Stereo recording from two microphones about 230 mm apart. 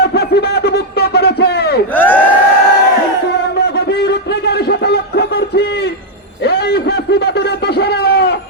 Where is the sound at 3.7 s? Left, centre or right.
Left.